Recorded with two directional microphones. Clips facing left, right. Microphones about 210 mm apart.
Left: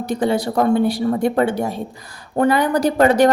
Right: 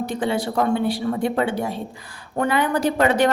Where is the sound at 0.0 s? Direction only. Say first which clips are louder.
Left 4 dB; 40° left (ahead or behind).